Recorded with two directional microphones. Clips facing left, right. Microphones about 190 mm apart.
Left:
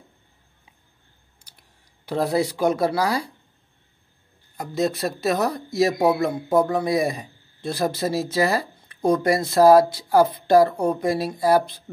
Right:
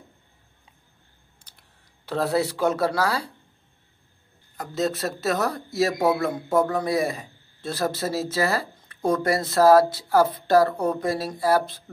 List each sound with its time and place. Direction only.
2.0 s a man's voice: 10° left (ahead or behind)
4.6 s a man's voice: 15° left (ahead or behind)